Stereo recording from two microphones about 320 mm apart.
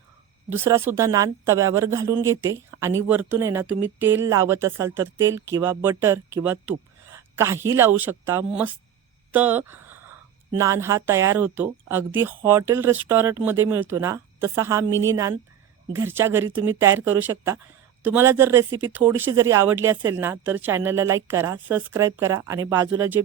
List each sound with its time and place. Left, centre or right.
0.5 s a woman's voice: centre